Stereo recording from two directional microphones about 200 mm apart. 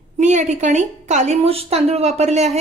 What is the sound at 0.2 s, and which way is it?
Speech, 35° right (ahead or behind).